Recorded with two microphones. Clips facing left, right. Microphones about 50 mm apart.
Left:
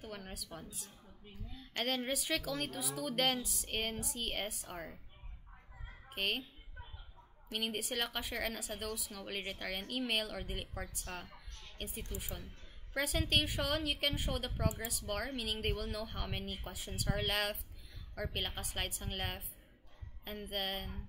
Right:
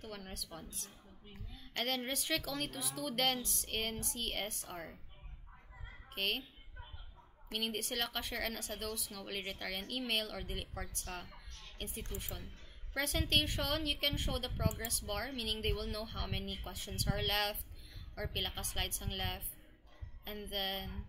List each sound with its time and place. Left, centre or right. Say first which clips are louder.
0.0 s speech: even; centre
6.0 s a child's voice: left 1 dB; centre
7.5 s speech: left 1 dB; centre